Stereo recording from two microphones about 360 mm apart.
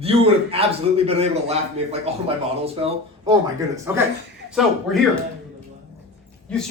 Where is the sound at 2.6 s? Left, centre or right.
Centre.